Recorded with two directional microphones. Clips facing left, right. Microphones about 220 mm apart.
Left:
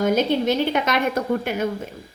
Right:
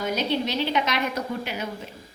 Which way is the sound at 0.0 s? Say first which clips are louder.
Left 6 dB; 50° left (ahead or behind).